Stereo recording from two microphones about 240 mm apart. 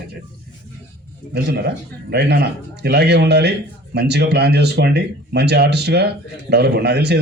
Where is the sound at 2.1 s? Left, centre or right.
Right.